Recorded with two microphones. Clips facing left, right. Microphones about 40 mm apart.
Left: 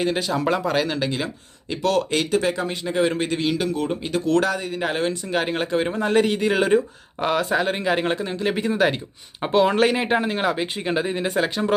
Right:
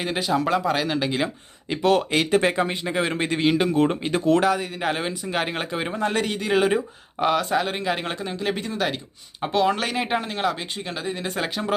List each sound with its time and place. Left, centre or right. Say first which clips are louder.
0.0 s speech: left 1 dB; centre
2.3 s speech: right 3 dB; right
2.9 s speech: left 2 dB; centre
4.4 s speech: even; centre
10.8 s speech: left 6 dB; left
11.3 s speech: left 5 dB; centre